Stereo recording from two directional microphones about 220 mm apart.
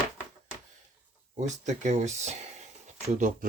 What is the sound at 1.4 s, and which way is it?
Speech, 30° right (ahead or behind).